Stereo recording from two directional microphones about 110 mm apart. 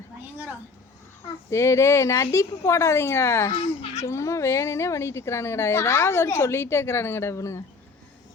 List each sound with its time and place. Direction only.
1.5 s a woman's voice: 25° left (ahead or behind)